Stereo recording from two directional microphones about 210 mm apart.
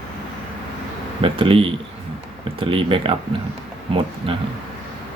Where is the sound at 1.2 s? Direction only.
25° right (ahead or behind).